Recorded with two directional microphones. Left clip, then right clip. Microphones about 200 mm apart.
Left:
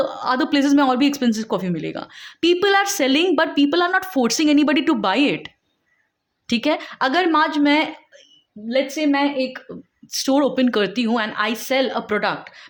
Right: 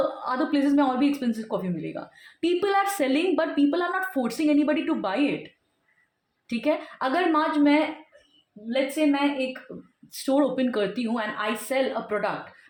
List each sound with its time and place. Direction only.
0.2 s speech: 40° left (ahead or behind)
6.5 s speech: 40° left (ahead or behind)